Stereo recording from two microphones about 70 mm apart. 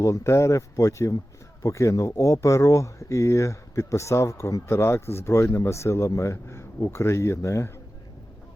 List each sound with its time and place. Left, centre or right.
0.0 s speech: left